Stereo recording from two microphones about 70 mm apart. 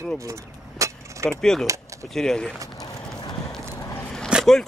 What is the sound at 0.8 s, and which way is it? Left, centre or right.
Keys jangling, right.